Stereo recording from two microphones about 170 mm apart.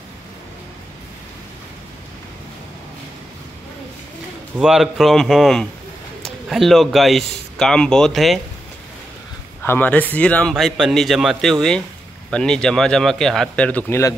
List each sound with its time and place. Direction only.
4.6 s a man's voice: centre (ahead or behind)
9.6 s a man's voice: 10° left (ahead or behind)